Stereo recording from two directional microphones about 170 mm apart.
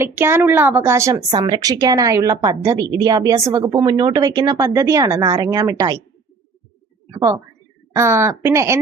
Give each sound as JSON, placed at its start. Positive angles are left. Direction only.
{"t": 0.0, "sound": "a woman's voice", "side_deg": -15}
{"t": 1.3, "sound": "a woman's voice", "side_deg": -25}
{"t": 7.1, "sound": "a woman's voice", "side_deg": -20}